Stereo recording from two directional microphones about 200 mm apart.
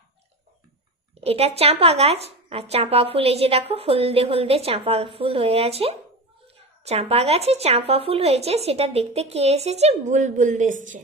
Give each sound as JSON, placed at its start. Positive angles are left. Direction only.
{"t": 1.2, "sound": "a woman's voice", "side_deg": -30}